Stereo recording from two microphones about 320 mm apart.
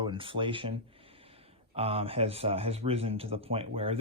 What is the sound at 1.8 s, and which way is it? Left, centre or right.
Speech, centre.